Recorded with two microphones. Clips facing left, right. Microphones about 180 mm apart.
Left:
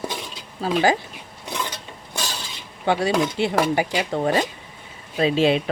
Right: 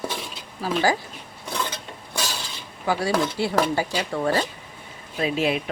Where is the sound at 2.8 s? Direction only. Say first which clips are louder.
Left 3 dB; 25° left (ahead or behind).